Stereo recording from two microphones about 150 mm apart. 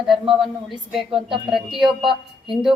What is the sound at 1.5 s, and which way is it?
Speech, centre (ahead or behind).